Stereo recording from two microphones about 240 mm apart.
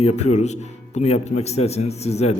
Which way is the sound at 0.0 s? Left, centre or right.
Left.